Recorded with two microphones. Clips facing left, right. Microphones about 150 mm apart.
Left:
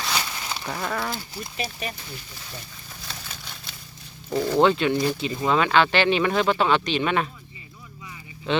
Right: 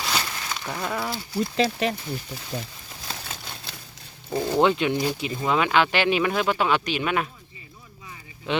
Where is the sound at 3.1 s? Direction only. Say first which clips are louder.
Right 4 dB; 35° right (ahead or behind).